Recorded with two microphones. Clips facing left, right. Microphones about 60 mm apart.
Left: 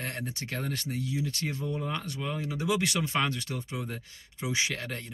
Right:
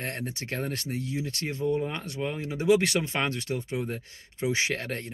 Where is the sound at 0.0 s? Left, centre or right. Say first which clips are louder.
Right 2 dB; right.